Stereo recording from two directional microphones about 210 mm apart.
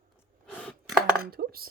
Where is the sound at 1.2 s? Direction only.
45° right (ahead or behind).